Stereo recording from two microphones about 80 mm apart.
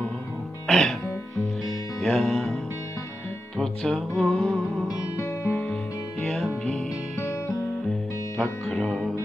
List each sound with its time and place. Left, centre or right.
0.7 s music: centre
2.0 s music: centre
3.5 s music: centre
6.2 s music: centre
7.2 s music: left
8.4 s music: centre